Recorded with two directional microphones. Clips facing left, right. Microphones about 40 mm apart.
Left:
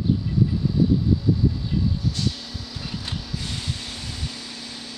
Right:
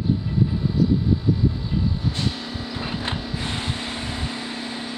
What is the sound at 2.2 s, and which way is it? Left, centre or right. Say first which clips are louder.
Vehicle: right 2 dB; right.